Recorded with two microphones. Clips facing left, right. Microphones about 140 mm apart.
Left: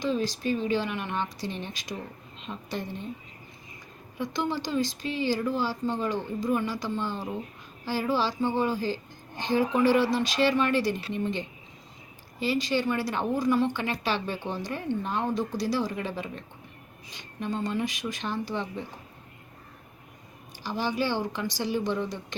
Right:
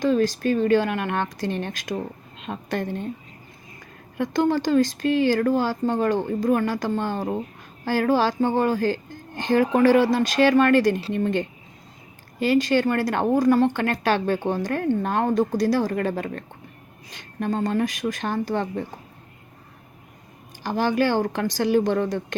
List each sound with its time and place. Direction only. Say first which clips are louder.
0.0 s a woman's voice: right 7 dB; 50° right (ahead or behind)
4.2 s a woman's voice: right 8 dB; 50° right (ahead or behind)
20.7 s a woman's voice: right 7 dB; 50° right (ahead or behind)